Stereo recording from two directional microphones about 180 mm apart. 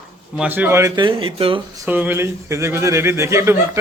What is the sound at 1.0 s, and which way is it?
Speech, 30° right (ahead or behind).